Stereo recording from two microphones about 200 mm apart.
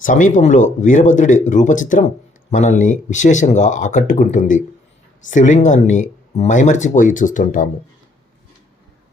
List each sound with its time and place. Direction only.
0.0 s speech: 40° left (ahead or behind)